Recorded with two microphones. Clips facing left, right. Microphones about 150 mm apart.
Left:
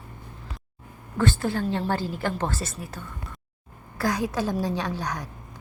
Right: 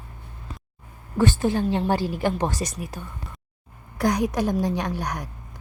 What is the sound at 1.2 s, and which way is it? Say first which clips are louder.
A woman's voice: right 3 dB; 15° right (ahead or behind).